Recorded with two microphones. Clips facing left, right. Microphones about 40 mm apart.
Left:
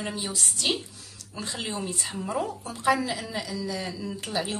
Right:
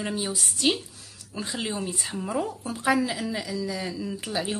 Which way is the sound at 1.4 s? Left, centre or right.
Centre.